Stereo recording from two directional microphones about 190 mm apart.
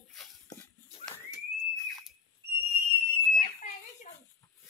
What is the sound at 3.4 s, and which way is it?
Smoke detector, 40° left (ahead or behind).